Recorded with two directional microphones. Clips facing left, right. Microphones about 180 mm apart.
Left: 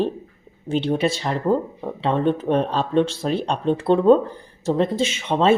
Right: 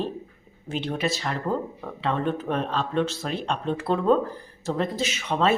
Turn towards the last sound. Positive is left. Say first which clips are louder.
# left 5 dB
turn(degrees=25)  # may be behind; listen again after turning